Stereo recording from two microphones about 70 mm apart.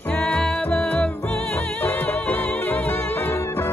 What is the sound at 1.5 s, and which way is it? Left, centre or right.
Music, left.